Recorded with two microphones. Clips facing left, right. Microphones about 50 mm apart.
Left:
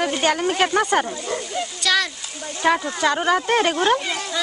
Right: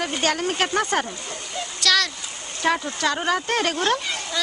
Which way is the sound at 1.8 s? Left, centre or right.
Centre.